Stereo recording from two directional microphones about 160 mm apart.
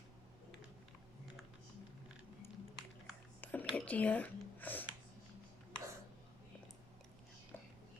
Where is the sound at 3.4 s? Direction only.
10° left (ahead or behind).